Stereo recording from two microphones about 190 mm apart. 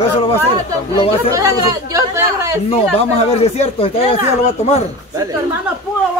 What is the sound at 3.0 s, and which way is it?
Speech, 35° left (ahead or behind).